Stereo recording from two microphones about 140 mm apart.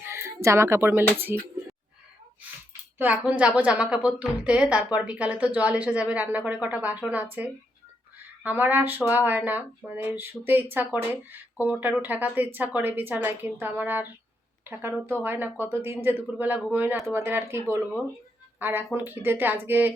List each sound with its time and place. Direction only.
0.0 s a woman's voice: 20° right (ahead or behind)
3.0 s a woman's voice: 10° right (ahead or behind)